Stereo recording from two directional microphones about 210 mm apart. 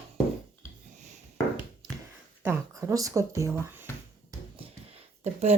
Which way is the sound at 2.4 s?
15° right (ahead or behind).